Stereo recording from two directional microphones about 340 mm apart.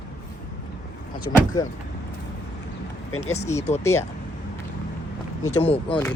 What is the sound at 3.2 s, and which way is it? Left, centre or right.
Speech, centre.